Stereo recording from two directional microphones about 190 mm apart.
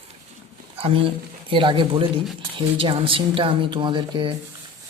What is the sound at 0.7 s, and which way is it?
A woman's voice, 30° right (ahead or behind).